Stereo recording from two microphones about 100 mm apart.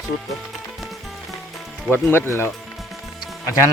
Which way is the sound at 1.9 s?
20° left (ahead or behind).